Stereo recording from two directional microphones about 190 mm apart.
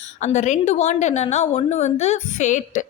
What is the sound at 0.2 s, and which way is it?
A woman's voice, 40° left (ahead or behind).